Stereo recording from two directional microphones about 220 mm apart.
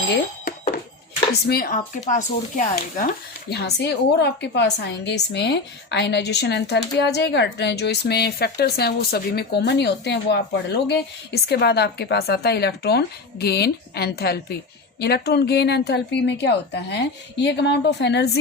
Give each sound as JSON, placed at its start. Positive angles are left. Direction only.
{"t": 0.4, "sound": "a sound", "side_deg": 40}
{"t": 1.5, "sound": "speech", "side_deg": 40}
{"t": 3.5, "sound": "a woman's voice", "side_deg": 50}